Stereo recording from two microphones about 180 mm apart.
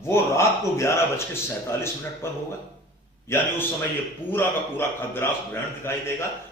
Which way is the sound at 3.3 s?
15° left (ahead or behind).